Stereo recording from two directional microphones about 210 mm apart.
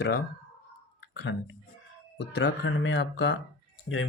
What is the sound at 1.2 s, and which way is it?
Speech, 60° left (ahead or behind).